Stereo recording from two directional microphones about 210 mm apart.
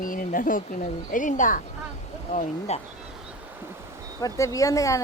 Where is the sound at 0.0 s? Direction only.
40° left (ahead or behind).